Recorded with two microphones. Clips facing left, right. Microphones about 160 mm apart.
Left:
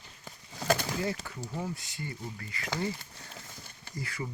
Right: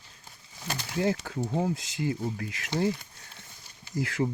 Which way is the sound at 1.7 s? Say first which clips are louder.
Right 10 dB; 90° right.